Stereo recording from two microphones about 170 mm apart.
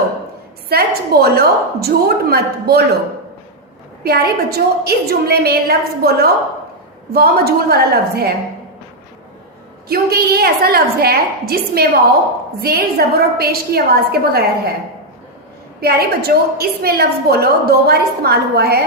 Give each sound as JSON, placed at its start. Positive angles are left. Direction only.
{"t": 0.7, "sound": "a woman's voice", "side_deg": -65}
{"t": 4.0, "sound": "a woman's voice", "side_deg": -65}
{"t": 9.9, "sound": "a woman's voice", "side_deg": -65}
{"t": 15.8, "sound": "a woman's voice", "side_deg": -65}